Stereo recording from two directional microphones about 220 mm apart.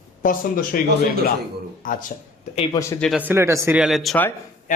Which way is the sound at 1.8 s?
40° left (ahead or behind).